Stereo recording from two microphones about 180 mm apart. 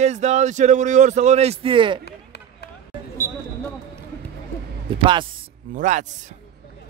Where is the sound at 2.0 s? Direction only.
65° left (ahead or behind).